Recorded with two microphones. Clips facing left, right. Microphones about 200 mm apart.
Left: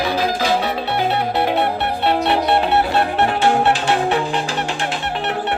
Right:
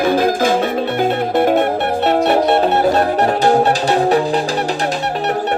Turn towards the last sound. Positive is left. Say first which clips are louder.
# right 5 dB
turn(degrees=-35)  # may be behind; listen again after turning